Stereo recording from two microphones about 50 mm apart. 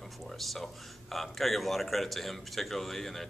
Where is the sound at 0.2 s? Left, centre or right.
Centre.